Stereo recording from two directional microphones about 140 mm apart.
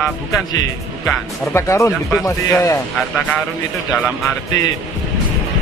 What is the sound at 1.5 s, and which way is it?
Speech, 20° left (ahead or behind).